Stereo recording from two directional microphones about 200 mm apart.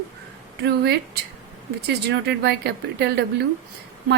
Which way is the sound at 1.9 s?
55° right (ahead or behind).